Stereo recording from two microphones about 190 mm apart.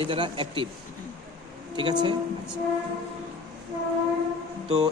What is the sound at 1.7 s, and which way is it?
Speech, 25° right (ahead or behind).